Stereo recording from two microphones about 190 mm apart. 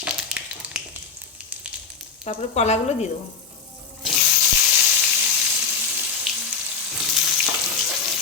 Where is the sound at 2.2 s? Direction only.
35° left (ahead or behind).